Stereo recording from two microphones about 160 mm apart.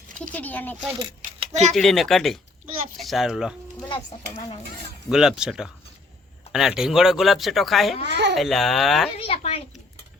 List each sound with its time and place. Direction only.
0.2 s speech: 10° left (ahead or behind)
0.9 s a sound: 40° right (ahead or behind)
1.7 s speech: centre (ahead or behind)
5.0 s speech: 5° right (ahead or behind)
8.0 s a child's voice: 90° right
8.4 s speech: centre (ahead or behind)
9.1 s a sound: 35° left (ahead or behind)